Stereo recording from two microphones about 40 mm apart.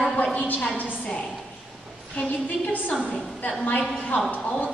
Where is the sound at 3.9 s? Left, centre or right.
Left.